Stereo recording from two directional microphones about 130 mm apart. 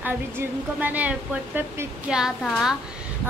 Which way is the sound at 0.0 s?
15° right (ahead or behind).